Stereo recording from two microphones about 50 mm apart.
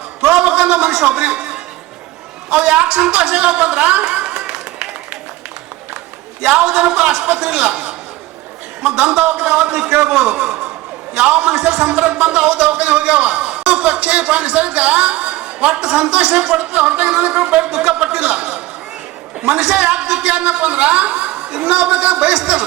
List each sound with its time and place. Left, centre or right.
0.2 s a sound: centre
1.1 s a woman's voice: right
4.0 s a sound: centre
6.4 s a man's voice: centre
16.6 s a man's voice: right
17.7 s a man's voice: centre
19.4 s a man's voice: centre